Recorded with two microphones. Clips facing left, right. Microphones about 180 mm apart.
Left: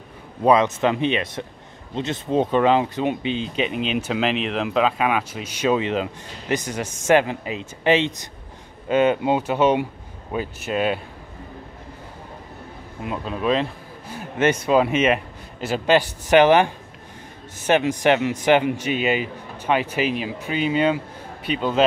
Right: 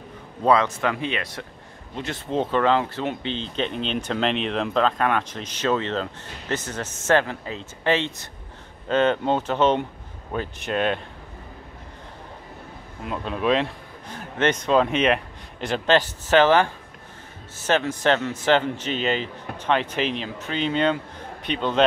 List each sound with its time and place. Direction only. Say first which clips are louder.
0.4 s a man's voice: left 3 dB; 20° left (ahead or behind)
13.0 s a man's voice: left 1 dB; 5° left (ahead or behind)